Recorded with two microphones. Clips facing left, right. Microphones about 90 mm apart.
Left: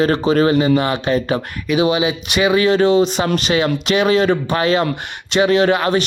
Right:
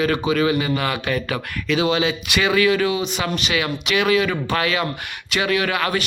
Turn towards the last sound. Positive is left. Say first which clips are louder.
# left 7 dB
turn(degrees=25)  # may be behind; listen again after turning